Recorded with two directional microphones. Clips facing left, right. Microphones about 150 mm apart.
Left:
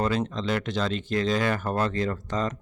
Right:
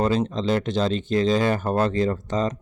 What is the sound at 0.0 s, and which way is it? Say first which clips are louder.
Speech: right 4 dB; 30° right (ahead or behind).